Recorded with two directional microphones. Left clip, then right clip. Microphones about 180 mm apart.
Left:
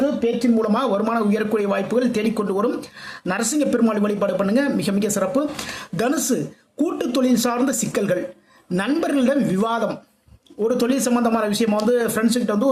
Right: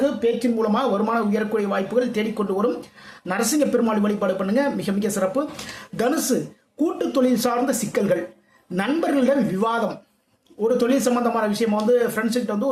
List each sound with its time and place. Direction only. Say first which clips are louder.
0.0 s a sound: even; 15° left (ahead or behind)
0.6 s speech: left 1 dB; 25° left (ahead or behind)
10.6 s a man's voice: right 1 dB; 30° left (ahead or behind)